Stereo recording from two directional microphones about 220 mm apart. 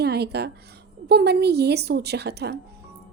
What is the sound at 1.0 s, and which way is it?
A woman's voice, 45° right (ahead or behind).